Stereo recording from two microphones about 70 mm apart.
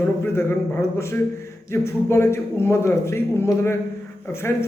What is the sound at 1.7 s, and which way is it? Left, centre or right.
A man's voice, left.